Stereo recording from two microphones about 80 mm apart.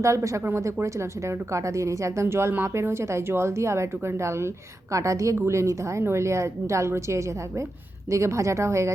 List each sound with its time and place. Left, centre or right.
0.0 s a woman's voice: right